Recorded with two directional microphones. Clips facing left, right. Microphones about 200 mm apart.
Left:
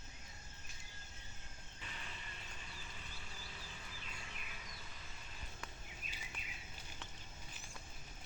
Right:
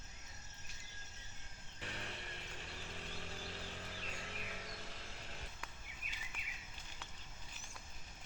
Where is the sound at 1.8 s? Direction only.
70° right (ahead or behind).